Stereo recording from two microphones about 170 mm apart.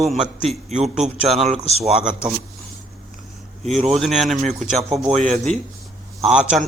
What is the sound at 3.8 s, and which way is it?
A man's voice, 40° right (ahead or behind).